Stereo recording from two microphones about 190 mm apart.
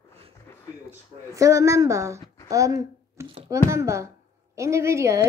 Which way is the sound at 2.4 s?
15° right (ahead or behind).